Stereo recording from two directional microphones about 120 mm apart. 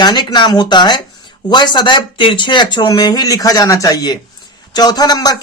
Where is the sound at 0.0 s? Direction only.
35° left (ahead or behind).